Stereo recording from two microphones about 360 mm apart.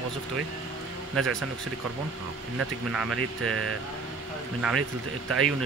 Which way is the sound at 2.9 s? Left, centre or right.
Centre.